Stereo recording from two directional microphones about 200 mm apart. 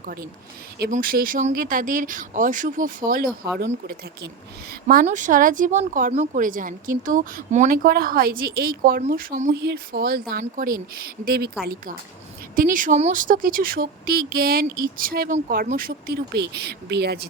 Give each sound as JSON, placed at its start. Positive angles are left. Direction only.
{"t": 0.9, "sound": "speech", "side_deg": -40}
{"t": 4.7, "sound": "speech", "side_deg": -45}